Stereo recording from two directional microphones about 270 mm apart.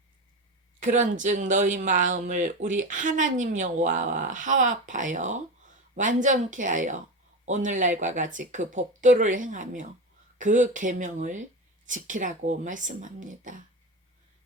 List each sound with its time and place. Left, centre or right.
0.8 s speech: right